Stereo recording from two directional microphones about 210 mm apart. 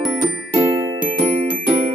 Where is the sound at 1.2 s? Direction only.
25° right (ahead or behind).